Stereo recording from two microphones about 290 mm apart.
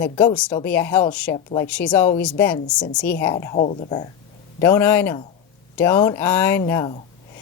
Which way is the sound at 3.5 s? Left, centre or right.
Left.